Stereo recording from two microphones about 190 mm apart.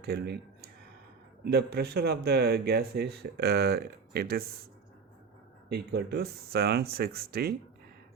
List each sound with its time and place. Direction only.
0.0 s speech: 55° right (ahead or behind)
5.6 s speech: 60° right (ahead or behind)